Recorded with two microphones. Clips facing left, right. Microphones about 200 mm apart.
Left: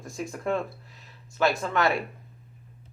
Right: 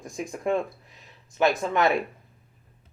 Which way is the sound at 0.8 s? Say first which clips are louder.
Left 1 dB; 20° right (ahead or behind).